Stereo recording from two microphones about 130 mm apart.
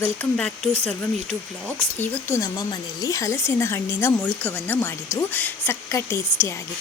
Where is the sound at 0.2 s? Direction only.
15° left (ahead or behind).